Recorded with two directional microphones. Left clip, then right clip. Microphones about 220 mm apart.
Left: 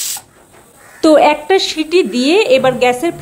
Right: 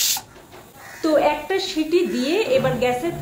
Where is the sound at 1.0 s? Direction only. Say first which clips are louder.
Left 10 dB; 45° left (ahead or behind).